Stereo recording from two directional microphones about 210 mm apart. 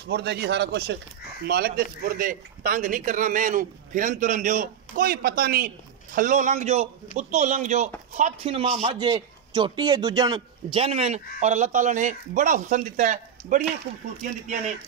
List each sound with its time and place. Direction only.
0.1 s a man's voice: 50° right (ahead or behind); by 13.7 s 35° right (ahead or behind)